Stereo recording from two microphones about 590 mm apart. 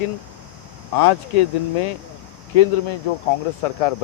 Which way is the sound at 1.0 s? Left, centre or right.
Left.